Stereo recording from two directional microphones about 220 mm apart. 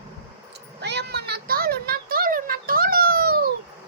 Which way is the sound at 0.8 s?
50° right (ahead or behind).